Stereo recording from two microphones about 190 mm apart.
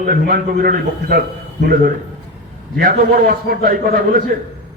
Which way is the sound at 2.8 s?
50° right (ahead or behind).